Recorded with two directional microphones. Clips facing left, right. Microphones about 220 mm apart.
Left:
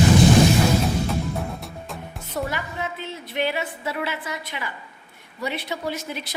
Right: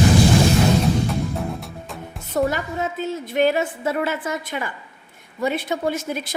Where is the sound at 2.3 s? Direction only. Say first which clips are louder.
Right 7 dB; 45° right (ahead or behind).